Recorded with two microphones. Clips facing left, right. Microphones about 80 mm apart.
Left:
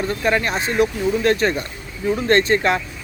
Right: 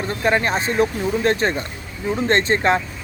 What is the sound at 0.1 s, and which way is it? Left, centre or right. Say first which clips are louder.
Speech: right 4 dB; right.